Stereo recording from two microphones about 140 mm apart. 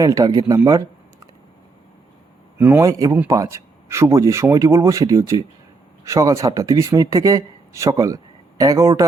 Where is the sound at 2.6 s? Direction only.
15° right (ahead or behind).